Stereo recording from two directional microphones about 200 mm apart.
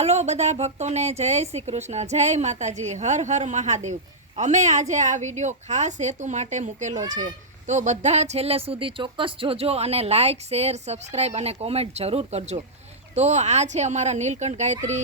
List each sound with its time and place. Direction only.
0.0 s speech: 35° right (ahead or behind)